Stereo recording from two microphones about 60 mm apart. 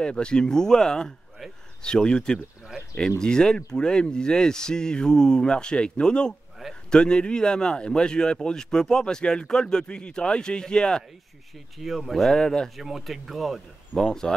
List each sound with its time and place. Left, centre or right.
0.0 s speech: centre
11.8 s speech: centre
12.7 s speech: centre
13.9 s speech: left